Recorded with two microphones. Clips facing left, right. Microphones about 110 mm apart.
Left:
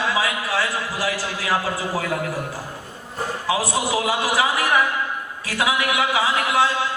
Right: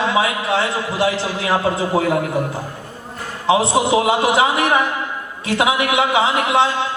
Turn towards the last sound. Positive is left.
turn(degrees=-25)  # may be behind; listen again after turning